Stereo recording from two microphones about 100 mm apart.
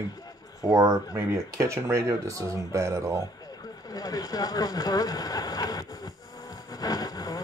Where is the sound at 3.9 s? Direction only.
40° left (ahead or behind).